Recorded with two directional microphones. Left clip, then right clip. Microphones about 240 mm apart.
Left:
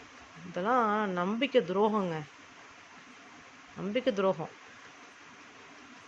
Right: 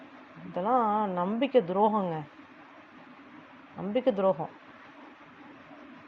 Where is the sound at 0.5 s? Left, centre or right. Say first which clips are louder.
Right 2 dB; centre.